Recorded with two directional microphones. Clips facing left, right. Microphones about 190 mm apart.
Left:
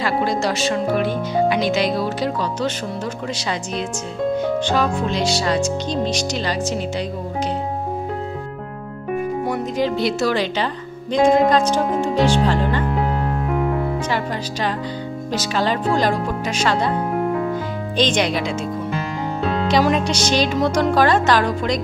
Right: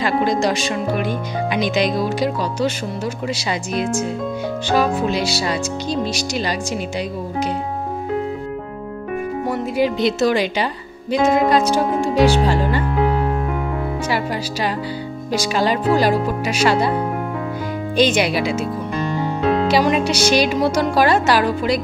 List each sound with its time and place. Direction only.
0.0 s speech: 20° right (ahead or behind)
9.5 s speech: 10° right (ahead or behind)
15.3 s speech: 10° right (ahead or behind)
17.9 s speech: 10° right (ahead or behind)